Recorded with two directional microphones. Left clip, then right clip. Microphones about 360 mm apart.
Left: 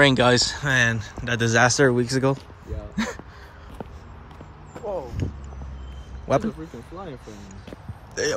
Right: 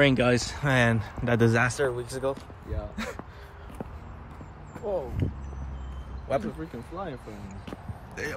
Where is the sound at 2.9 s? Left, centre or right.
Centre.